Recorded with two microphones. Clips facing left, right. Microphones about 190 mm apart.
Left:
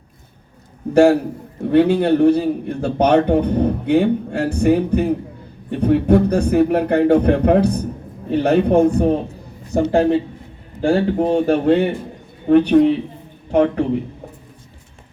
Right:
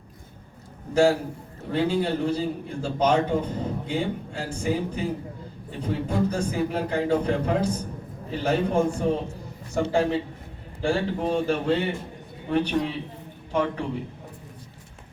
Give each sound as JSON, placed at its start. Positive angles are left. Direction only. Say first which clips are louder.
{"t": 0.9, "sound": "a man's voice", "louder": "left 8 dB", "side_deg": 65}